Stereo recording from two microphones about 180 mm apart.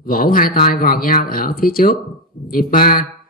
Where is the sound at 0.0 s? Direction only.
50° left (ahead or behind).